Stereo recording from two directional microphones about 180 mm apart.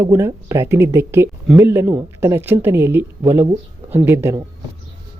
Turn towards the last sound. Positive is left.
turn(degrees=-15)  # may be behind; listen again after turning